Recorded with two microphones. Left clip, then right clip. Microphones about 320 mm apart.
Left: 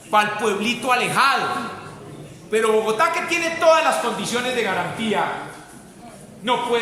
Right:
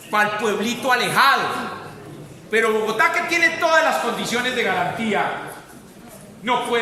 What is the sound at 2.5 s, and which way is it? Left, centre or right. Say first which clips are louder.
A man's voice: left 1 dB; centre.